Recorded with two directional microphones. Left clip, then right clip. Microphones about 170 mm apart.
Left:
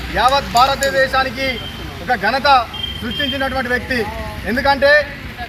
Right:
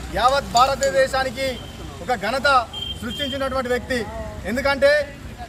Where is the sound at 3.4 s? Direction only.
30° right (ahead or behind).